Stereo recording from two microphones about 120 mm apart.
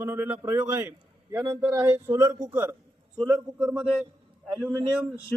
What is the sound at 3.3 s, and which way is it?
Speech, 10° right (ahead or behind).